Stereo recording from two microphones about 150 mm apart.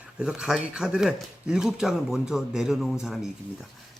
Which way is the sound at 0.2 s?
5° right (ahead or behind).